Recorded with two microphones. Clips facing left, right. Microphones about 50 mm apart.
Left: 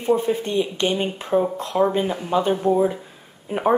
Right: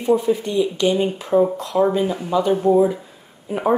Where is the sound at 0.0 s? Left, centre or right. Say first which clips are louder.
Right 2 dB; left.